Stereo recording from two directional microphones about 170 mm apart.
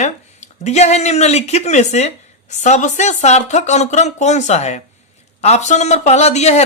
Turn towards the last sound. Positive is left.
turn(degrees=40)  # may be behind; listen again after turning